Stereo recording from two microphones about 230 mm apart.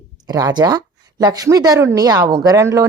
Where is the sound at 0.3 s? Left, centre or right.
Centre.